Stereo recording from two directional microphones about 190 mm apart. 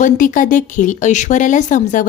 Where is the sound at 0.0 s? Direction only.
45° left (ahead or behind).